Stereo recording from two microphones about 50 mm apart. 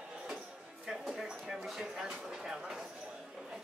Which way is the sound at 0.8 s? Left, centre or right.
Centre.